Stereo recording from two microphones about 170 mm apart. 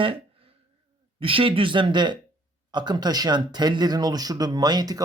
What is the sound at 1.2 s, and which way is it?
Speech, 30° right (ahead or behind).